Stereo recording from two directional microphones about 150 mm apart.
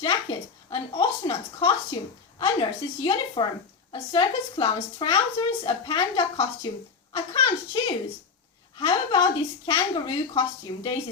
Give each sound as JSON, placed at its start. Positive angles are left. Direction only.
{"t": 0.0, "sound": "a woman's voice", "side_deg": 35}